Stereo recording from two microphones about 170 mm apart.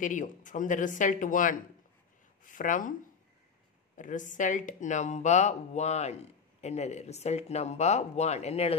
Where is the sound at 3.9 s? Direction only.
50° left (ahead or behind).